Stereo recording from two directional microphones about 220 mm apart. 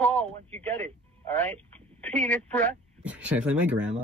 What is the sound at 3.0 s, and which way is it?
Music, 5° right (ahead or behind).